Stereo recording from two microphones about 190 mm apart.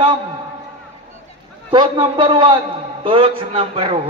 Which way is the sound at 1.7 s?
25° right (ahead or behind).